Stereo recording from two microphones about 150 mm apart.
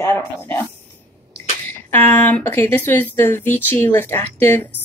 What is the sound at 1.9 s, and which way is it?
Speech, 10° left (ahead or behind).